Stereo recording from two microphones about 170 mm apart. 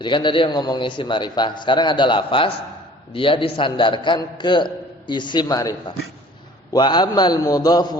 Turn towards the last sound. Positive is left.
turn(degrees=25)  # may be behind; listen again after turning